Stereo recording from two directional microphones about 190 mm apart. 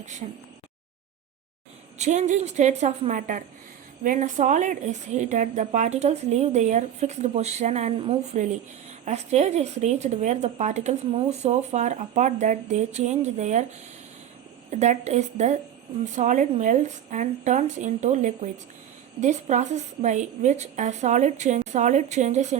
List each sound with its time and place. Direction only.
2.0 s speech: 40° right (ahead or behind)
14.7 s speech: 35° right (ahead or behind)